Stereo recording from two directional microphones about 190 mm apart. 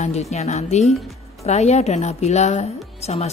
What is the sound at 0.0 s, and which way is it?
A woman's voice, 35° left (ahead or behind).